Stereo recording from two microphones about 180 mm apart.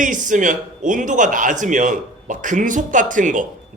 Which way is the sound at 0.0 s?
45° right (ahead or behind).